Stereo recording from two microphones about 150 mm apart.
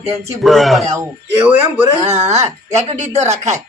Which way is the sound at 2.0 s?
50° right (ahead or behind).